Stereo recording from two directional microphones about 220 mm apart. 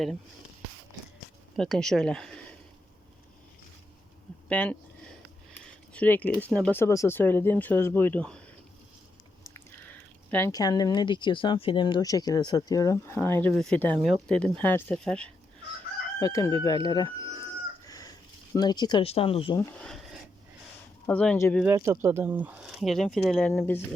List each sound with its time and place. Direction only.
1.5 s speech: centre (ahead or behind)
4.4 s speech: 5° left (ahead or behind)
5.9 s speech: 5° left (ahead or behind)
9.9 s speech: 10° left (ahead or behind)
16.2 s speech: 15° left (ahead or behind)
17.8 s a sound: 15° left (ahead or behind)
19.8 s a sound: centre (ahead or behind)
21.1 s speech: 5° left (ahead or behind)
21.6 s speech: 10° right (ahead or behind); by 23.8 s 10° left (ahead or behind)